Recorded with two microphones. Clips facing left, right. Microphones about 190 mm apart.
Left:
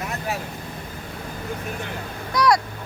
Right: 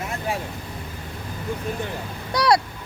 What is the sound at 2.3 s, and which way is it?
Vehicle, 30° right (ahead or behind).